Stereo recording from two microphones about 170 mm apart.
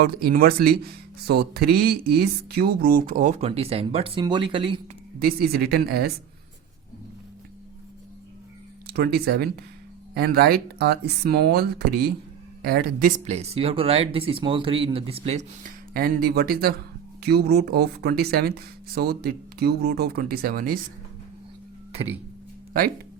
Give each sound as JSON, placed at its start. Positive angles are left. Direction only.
{"t": 0.0, "sound": "speech", "side_deg": -60}
{"t": 5.2, "sound": "speech", "side_deg": -65}
{"t": 8.9, "sound": "speech", "side_deg": -65}
{"t": 15.9, "sound": "speech", "side_deg": -60}